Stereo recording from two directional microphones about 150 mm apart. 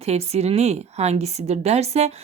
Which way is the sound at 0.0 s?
45° right (ahead or behind).